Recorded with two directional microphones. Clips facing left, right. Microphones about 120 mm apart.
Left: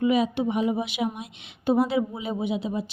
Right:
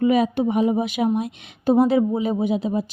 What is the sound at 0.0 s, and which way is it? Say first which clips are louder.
Speech: right 4 dB; 45° right (ahead or behind).